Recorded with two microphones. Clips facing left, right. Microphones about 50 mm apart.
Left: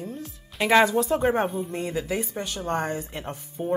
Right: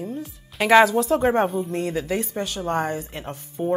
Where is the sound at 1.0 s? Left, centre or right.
Centre.